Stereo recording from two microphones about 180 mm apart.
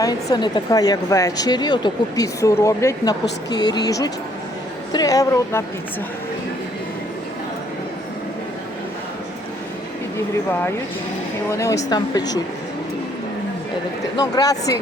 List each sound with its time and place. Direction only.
0.0 s speech: 20° left (ahead or behind)
11.5 s a woman's voice: 15° left (ahead or behind)
14.2 s speech: 20° left (ahead or behind)